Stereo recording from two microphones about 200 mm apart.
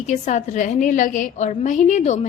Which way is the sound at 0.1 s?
35° left (ahead or behind).